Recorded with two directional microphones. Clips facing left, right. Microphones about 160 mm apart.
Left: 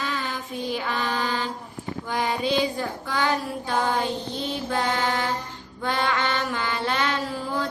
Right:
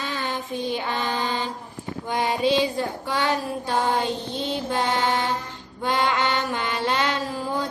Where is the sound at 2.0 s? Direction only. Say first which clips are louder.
Right 3 dB; 20° right (ahead or behind).